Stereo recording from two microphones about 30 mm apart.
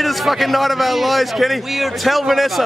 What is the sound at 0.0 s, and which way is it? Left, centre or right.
A man's voice, centre.